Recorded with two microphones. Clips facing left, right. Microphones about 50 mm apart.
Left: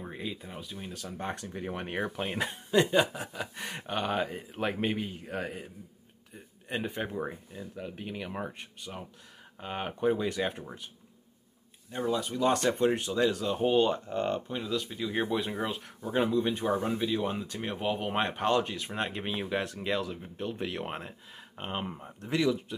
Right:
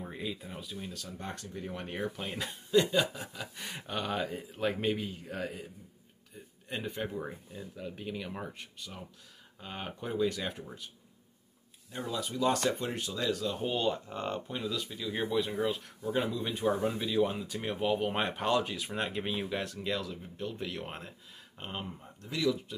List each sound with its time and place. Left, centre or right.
0.0 s a sound: centre
0.6 s speech: centre
1.1 s speech: left; by 5.7 s centre
7.0 s speech: centre
11.9 s speech: centre
12.8 s speech: left
14.0 s speech: centre
14.7 s speech: centre; by 22.0 s left